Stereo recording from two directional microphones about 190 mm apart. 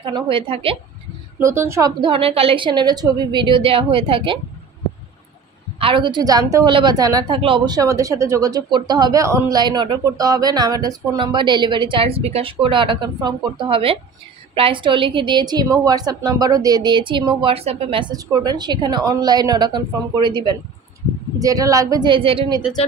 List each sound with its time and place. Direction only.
0.0 s a woman's voice: 25° right (ahead or behind)
1.4 s a woman's voice: 15° right (ahead or behind)
5.8 s a woman's voice: 25° right (ahead or behind)